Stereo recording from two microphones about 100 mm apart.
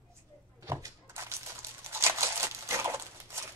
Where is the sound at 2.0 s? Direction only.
25° right (ahead or behind).